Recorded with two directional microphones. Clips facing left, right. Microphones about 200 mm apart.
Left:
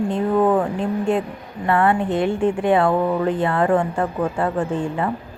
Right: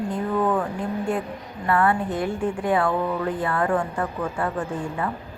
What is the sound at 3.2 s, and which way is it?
A woman's voice, 25° left (ahead or behind).